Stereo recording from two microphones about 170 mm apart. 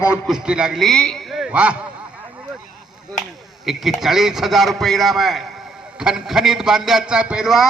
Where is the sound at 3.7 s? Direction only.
Centre (ahead or behind).